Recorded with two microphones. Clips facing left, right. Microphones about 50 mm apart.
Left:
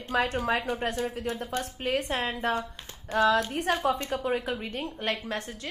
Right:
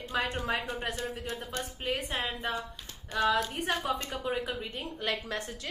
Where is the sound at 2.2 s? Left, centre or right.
Left.